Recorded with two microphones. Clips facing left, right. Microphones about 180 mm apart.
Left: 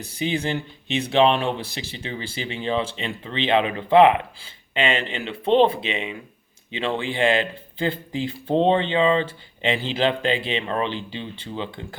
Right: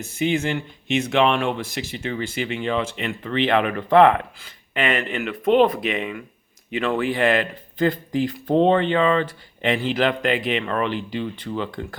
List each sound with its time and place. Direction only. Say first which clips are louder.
0.0 s speech: right 3 dB; 35° left (ahead or behind)